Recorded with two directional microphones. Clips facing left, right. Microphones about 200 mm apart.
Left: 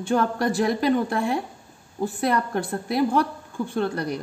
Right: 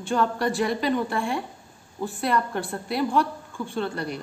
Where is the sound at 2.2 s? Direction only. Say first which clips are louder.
Left 1 dB; 45° left (ahead or behind).